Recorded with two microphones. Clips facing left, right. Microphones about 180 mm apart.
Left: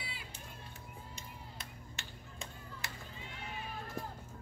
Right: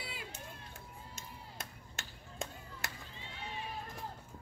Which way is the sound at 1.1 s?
45° right (ahead or behind).